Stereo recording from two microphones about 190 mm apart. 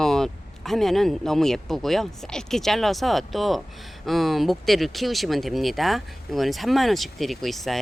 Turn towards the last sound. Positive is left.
turn(degrees=0)  # may be behind; listen again after turning